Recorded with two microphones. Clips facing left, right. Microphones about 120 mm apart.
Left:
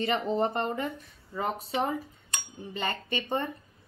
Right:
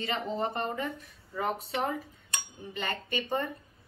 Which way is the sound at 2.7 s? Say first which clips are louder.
Left 2 dB; 30° left (ahead or behind).